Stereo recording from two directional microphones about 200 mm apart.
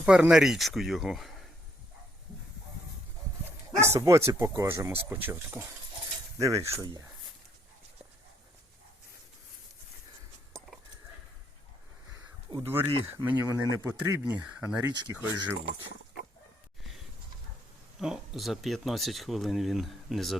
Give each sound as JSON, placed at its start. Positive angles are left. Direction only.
{"t": 0.0, "sound": "speech", "side_deg": -5}
{"t": 3.8, "sound": "speech", "side_deg": -15}
{"t": 12.1, "sound": "a sound", "side_deg": -15}
{"t": 13.1, "sound": "speech", "side_deg": -10}
{"t": 14.9, "sound": "speech", "side_deg": -20}
{"t": 18.0, "sound": "speech", "side_deg": 0}